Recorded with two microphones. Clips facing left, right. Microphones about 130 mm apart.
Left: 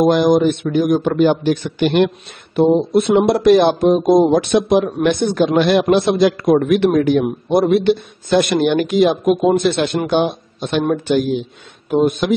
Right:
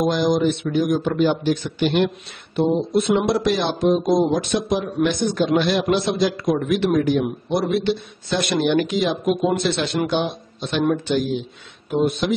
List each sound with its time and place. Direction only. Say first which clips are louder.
0.0 s a man's voice: left 6 dB; 55° left (ahead or behind)